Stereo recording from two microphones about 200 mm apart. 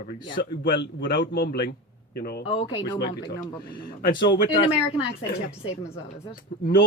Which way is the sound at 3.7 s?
45° left (ahead or behind).